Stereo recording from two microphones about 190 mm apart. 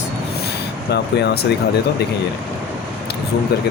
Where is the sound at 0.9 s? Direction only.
60° left (ahead or behind).